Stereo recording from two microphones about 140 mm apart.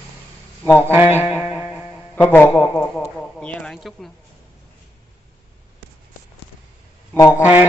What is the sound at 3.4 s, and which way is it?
Speech, 10° left (ahead or behind).